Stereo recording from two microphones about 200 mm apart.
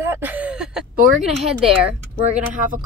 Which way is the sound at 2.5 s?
40° right (ahead or behind).